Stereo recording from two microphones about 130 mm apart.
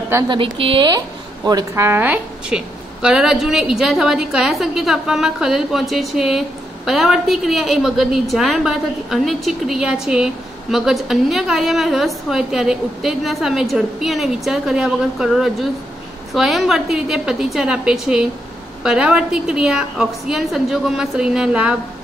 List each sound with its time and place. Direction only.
0.3 s a woman's voice: 45° right (ahead or behind)
1.9 s a woman's voice: 15° right (ahead or behind)